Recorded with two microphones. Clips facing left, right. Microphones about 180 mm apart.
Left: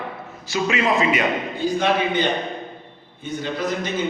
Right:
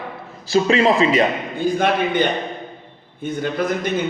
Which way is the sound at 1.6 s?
50° right (ahead or behind).